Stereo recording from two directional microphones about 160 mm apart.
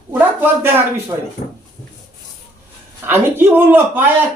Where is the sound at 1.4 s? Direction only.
55° left (ahead or behind).